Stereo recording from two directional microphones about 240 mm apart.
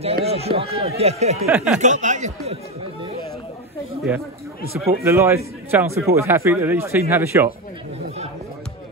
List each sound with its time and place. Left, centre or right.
0.0 s speech: right
1.4 s a man's voice: centre
1.8 s speech: right
4.1 s a man's voice: centre